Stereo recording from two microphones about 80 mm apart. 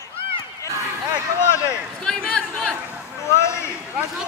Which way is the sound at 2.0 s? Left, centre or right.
Centre.